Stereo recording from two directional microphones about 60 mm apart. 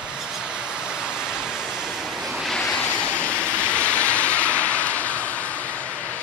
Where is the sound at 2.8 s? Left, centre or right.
Left.